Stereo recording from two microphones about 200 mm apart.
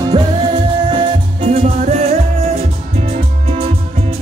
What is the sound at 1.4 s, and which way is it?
Music, 35° right (ahead or behind).